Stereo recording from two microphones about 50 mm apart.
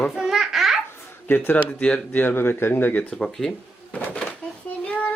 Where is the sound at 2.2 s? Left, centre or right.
Left.